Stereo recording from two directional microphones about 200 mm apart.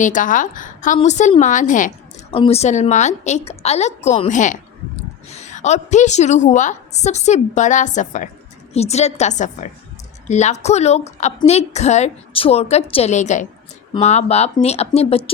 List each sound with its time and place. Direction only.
0.0 s a woman's voice: 40° left (ahead or behind)
2.3 s a woman's voice: 30° left (ahead or behind)